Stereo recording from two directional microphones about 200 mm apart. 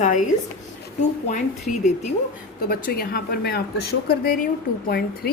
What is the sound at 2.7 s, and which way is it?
Speech, 50° left (ahead or behind).